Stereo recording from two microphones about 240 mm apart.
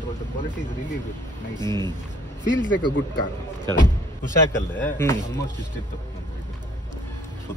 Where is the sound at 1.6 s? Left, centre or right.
Centre.